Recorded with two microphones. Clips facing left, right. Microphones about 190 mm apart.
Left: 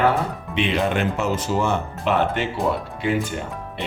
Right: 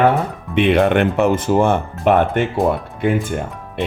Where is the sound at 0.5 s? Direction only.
60° right (ahead or behind).